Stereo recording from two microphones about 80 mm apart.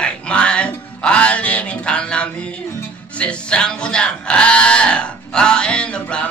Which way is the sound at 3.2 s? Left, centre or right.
Centre.